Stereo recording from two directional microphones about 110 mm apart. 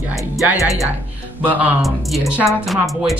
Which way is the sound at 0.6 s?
30° left (ahead or behind).